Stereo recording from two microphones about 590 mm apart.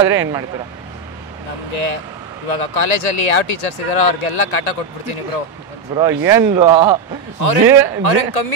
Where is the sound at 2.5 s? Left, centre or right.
Left.